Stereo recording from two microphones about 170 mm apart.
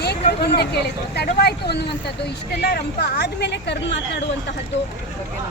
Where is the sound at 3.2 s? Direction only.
80° left.